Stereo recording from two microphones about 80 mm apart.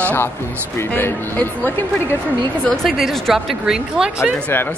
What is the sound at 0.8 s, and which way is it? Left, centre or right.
Speech, left.